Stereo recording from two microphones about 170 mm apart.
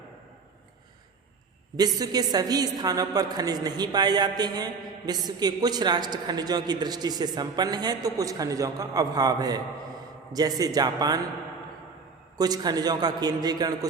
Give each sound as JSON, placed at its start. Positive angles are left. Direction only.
{"t": 1.7, "sound": "a woman's voice", "side_deg": -20}
{"t": 12.4, "sound": "a woman's voice", "side_deg": -25}